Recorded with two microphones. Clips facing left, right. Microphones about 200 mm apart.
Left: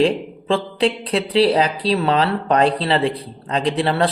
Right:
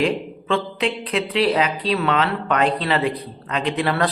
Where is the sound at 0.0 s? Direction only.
30° left (ahead or behind).